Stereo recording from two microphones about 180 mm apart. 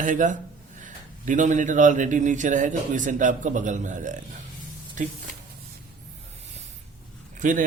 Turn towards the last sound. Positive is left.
turn(degrees=-45)  # may be behind; listen again after turning